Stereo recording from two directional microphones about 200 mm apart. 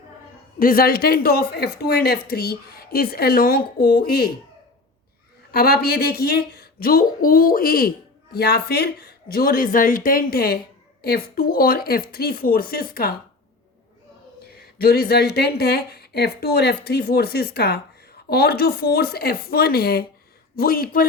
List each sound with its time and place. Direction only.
0.6 s speech: 45° left (ahead or behind)
5.5 s speech: 50° left (ahead or behind)
14.5 s speech: 50° left (ahead or behind)